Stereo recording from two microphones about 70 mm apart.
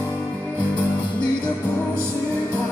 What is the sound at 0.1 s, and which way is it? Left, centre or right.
Music, left.